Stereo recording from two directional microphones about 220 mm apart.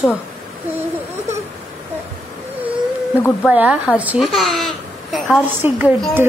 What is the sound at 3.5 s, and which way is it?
Speech, 5° right (ahead or behind).